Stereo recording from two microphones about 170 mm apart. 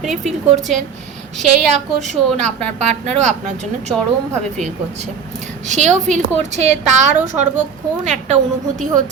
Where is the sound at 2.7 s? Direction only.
45° right (ahead or behind).